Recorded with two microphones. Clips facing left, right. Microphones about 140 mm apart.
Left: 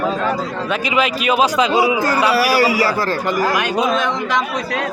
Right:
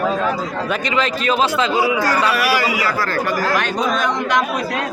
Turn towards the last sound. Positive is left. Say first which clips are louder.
# even
turn(degrees=0)  # may be behind; listen again after turning